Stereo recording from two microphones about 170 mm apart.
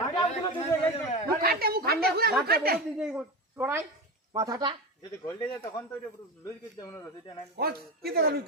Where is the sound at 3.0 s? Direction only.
5° right (ahead or behind); by 4.8 s 25° right (ahead or behind).